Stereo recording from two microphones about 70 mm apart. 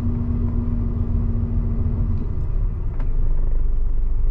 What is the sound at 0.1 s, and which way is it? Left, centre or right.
Vehicle, centre.